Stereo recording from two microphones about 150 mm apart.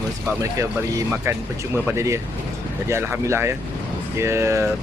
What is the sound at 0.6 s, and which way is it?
Speech, 20° right (ahead or behind).